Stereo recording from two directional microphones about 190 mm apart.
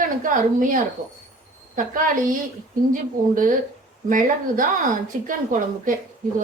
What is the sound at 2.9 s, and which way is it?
A woman's voice, 45° right (ahead or behind).